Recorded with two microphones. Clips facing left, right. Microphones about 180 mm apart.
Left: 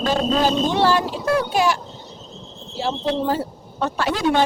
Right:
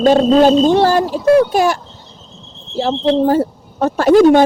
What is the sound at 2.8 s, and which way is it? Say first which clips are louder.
Speech: right 8 dB; 45° right (ahead or behind).